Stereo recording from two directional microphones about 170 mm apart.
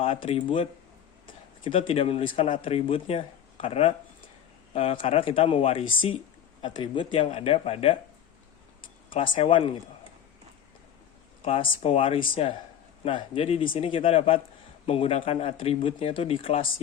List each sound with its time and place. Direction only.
0.0 s speech: 35° left (ahead or behind)
1.9 s speech: 35° left (ahead or behind)
9.0 s speech: 30° left (ahead or behind)
11.4 s speech: 35° left (ahead or behind)